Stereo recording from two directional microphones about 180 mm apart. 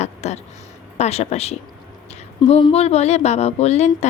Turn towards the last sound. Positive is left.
turn(degrees=35)  # may be behind; listen again after turning